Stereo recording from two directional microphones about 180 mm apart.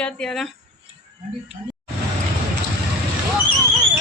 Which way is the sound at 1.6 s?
30° right (ahead or behind).